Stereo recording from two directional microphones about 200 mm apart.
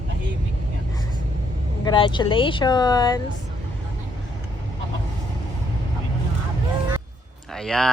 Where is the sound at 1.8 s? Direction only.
20° left (ahead or behind).